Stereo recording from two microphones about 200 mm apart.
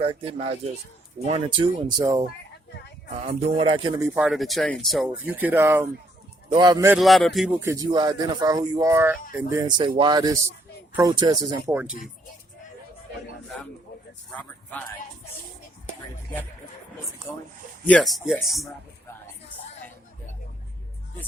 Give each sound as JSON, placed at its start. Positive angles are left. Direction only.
{"t": 0.0, "sound": "speech", "side_deg": -30}
{"t": 4.1, "sound": "speech", "side_deg": 0}
{"t": 6.9, "sound": "speech", "side_deg": 0}
{"t": 7.6, "sound": "speech", "side_deg": -15}
{"t": 14.3, "sound": "speech", "side_deg": 10}
{"t": 17.8, "sound": "speech", "side_deg": 5}